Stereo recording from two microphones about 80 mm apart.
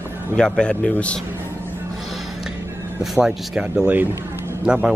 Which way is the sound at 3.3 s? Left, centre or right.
Centre.